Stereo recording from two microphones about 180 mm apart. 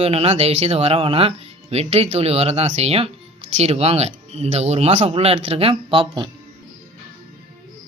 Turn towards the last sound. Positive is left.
turn(degrees=-30)  # may be behind; listen again after turning